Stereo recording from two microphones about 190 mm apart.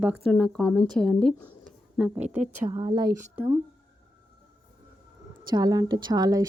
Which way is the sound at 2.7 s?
20° right (ahead or behind).